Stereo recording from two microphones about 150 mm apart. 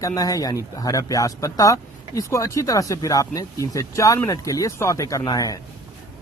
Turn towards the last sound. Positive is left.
turn(degrees=25)  # may be behind; listen again after turning